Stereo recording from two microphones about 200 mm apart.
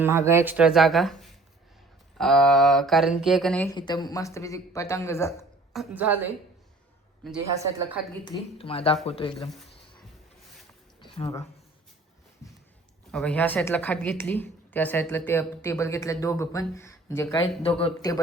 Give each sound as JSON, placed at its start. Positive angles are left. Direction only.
{"t": 0.0, "sound": "speech", "side_deg": -15}
{"t": 3.7, "sound": "a woman's voice", "side_deg": 20}
{"t": 5.7, "sound": "a woman's voice", "side_deg": -5}
{"t": 7.5, "sound": "a woman's voice", "side_deg": -15}
{"t": 8.2, "sound": "speech", "side_deg": 25}
{"t": 11.0, "sound": "a sound", "side_deg": 25}
{"t": 13.1, "sound": "a woman's voice", "side_deg": 5}
{"t": 17.4, "sound": "speech", "side_deg": 30}